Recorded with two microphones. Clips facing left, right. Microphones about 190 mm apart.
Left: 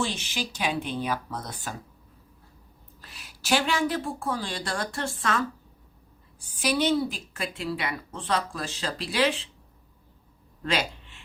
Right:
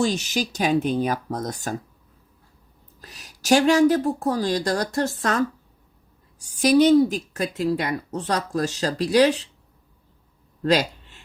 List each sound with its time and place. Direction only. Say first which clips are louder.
0.0 s speech: right 7 dB; 40° right (ahead or behind)
3.0 s a woman's voice: right 4 dB; 40° right (ahead or behind)
6.4 s speech: right 9 dB; 40° right (ahead or behind)
10.6 s a sound: right 8 dB; 40° right (ahead or behind)